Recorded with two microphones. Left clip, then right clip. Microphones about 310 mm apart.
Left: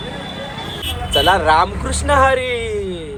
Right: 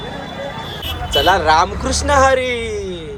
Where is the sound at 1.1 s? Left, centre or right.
Centre.